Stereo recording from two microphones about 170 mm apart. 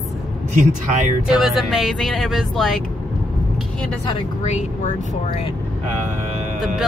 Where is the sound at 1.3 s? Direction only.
Centre (ahead or behind).